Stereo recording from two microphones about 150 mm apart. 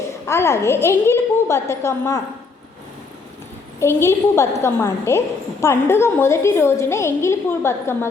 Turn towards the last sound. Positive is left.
turn(degrees=15)  # may be behind; listen again after turning